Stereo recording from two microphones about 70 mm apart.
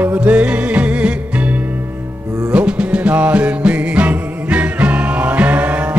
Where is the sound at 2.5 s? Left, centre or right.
Centre.